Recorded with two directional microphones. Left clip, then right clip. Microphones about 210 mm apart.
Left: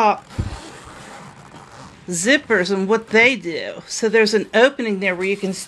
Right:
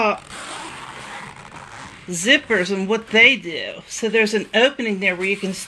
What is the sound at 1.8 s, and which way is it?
Zipper, 50° left (ahead or behind).